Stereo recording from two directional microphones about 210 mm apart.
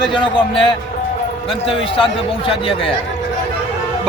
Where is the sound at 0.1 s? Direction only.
25° left (ahead or behind).